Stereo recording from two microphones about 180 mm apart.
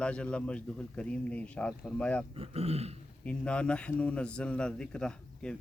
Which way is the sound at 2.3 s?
35° right (ahead or behind).